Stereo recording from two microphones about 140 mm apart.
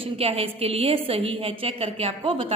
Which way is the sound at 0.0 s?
45° right (ahead or behind).